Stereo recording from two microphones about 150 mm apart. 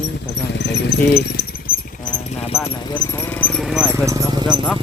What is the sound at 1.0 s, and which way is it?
Speech, 90° left.